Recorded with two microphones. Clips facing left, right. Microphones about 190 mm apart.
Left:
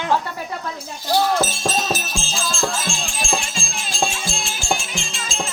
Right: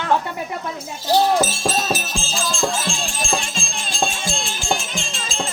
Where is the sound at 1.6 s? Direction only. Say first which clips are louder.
Right 1 dB; 5° right (ahead or behind).